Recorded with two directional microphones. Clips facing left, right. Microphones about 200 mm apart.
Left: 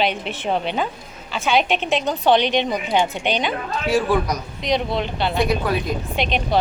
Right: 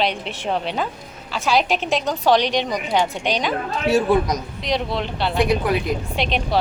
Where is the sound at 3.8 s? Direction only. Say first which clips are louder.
Right 2 dB; 25° right (ahead or behind).